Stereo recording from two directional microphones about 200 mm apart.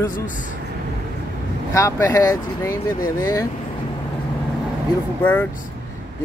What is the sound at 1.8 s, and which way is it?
Speech, 15° left (ahead or behind).